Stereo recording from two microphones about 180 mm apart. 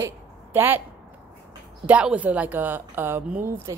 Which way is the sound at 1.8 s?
5° right (ahead or behind).